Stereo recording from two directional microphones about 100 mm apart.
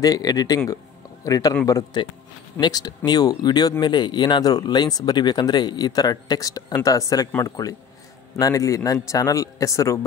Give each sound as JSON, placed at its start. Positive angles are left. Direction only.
{"t": 0.0, "sound": "a man's voice", "side_deg": 40}
{"t": 2.6, "sound": "a man's voice", "side_deg": 45}